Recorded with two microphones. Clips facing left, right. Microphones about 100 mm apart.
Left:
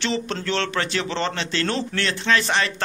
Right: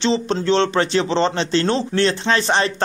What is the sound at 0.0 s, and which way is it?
Speech, 25° right (ahead or behind).